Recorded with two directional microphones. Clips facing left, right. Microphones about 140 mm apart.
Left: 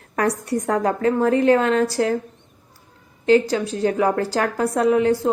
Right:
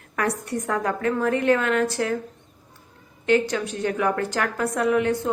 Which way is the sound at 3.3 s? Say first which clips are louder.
Left 4 dB; 30° left (ahead or behind).